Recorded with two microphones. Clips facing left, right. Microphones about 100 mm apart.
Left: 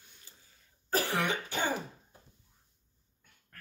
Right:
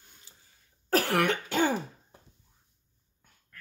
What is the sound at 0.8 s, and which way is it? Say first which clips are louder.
Throat clearing: right 5 dB; 70° right (ahead or behind).